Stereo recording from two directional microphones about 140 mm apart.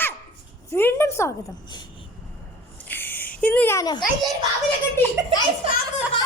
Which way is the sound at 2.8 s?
15° left (ahead or behind).